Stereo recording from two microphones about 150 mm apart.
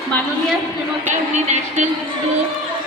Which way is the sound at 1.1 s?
50° right (ahead or behind).